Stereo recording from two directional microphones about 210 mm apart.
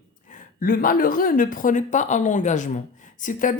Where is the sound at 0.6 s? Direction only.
40° left (ahead or behind).